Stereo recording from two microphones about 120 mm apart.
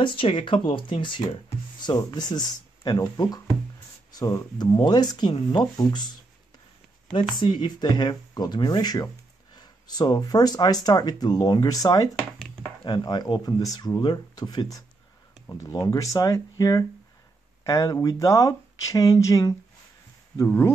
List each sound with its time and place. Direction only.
0.0 s speech: 45° left (ahead or behind)
7.1 s speech: 45° left (ahead or behind); by 12.1 s 30° left (ahead or behind)
12.8 s speech: 40° left (ahead or behind); by 20.7 s 20° left (ahead or behind)